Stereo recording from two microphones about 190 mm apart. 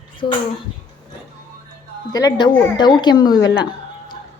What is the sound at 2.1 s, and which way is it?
A woman's voice, 20° left (ahead or behind).